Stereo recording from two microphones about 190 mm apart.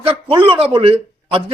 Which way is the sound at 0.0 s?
30° right (ahead or behind).